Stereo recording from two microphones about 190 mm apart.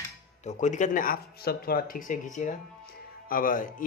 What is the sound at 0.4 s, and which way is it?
Speech, 40° left (ahead or behind).